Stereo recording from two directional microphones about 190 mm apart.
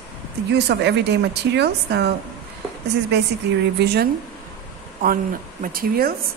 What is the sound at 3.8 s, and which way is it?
Speech, 55° right (ahead or behind).